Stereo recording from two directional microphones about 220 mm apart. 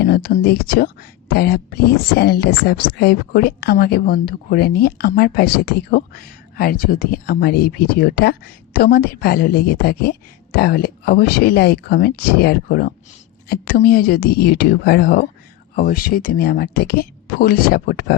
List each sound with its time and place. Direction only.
0.0 s speech: 45° left (ahead or behind)